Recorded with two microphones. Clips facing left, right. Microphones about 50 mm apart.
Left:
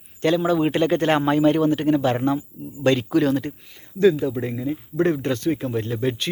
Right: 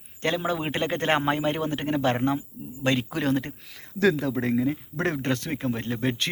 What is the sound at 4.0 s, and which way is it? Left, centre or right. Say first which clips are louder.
Speech: left 5 dB; right.